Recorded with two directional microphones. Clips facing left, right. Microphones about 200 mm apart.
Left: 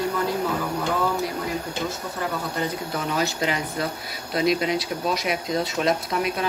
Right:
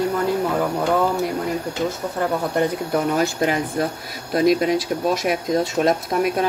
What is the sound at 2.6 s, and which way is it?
Speech, 55° right (ahead or behind).